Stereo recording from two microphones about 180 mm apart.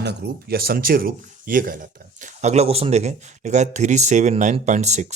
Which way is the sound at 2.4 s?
35° right (ahead or behind).